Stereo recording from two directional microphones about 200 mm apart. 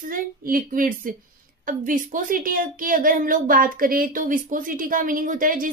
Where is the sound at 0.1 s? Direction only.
45° right (ahead or behind).